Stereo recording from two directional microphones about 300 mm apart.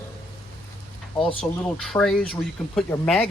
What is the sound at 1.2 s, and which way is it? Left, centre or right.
Speech, centre.